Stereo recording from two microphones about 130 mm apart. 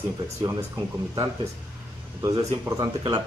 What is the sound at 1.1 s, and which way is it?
A man's voice, 25° right (ahead or behind).